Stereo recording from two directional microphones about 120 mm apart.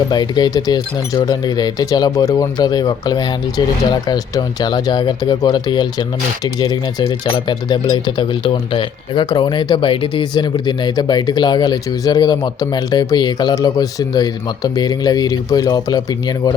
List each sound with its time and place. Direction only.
0.1 s speech: 35° left (ahead or behind)